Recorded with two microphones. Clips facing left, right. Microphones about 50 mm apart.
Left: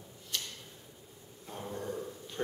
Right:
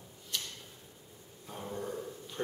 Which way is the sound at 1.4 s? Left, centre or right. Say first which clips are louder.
Even; centre.